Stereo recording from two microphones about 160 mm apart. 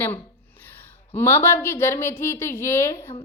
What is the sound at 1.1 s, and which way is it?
A woman's voice, 15° left (ahead or behind).